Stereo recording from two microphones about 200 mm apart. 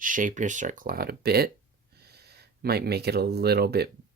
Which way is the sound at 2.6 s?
50° right (ahead or behind).